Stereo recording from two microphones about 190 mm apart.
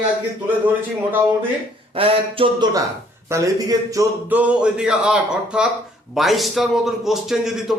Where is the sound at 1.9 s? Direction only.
30° right (ahead or behind).